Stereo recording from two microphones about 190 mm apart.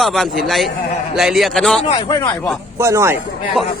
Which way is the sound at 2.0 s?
20° left (ahead or behind).